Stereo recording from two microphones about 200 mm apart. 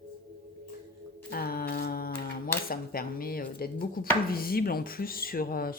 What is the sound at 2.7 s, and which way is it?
Speech, 50° left (ahead or behind).